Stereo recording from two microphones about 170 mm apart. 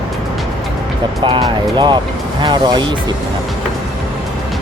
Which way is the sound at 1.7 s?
25° right (ahead or behind).